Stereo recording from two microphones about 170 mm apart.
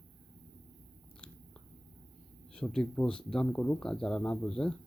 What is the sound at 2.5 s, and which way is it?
Speech, 5° left (ahead or behind).